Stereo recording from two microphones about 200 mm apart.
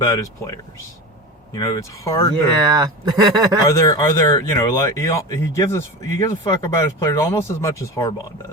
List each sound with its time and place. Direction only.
0.0 s speech: 15° left (ahead or behind)
2.7 s speech: 20° right (ahead or behind)
3.7 s speech: 15° left (ahead or behind)